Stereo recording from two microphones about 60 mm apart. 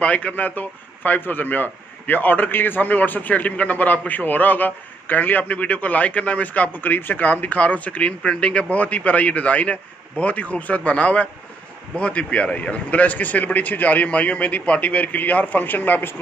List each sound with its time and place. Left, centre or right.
0.0 s a man's voice: left